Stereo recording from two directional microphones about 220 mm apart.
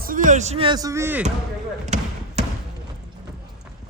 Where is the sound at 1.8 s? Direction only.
30° right (ahead or behind).